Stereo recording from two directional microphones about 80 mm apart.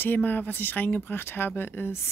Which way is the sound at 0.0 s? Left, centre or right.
Left.